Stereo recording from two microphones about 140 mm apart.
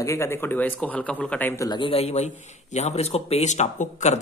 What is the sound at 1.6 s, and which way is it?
A man's voice, 35° left (ahead or behind).